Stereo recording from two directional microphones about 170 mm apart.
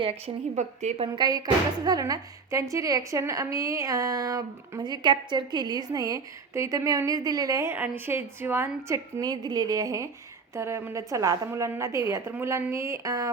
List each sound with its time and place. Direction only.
0.0 s a woman's voice: 40° right (ahead or behind); by 13.3 s 20° right (ahead or behind)